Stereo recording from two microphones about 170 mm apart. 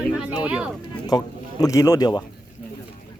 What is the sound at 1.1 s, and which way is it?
Speech, 25° left (ahead or behind).